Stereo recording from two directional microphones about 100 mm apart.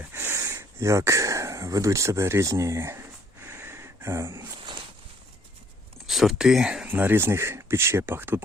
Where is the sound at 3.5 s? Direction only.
25° right (ahead or behind).